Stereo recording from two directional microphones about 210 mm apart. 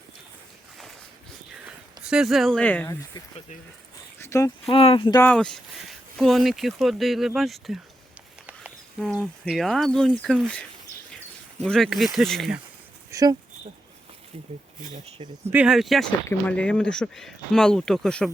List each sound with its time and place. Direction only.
2.0 s speech: centre (ahead or behind)
4.2 s a sound: 15° left (ahead or behind)
4.7 s speech: 25° left (ahead or behind)
5.2 s speech: 5° left (ahead or behind)
13.1 s a sound: 15° right (ahead or behind)
15.2 s speech: 10° right (ahead or behind)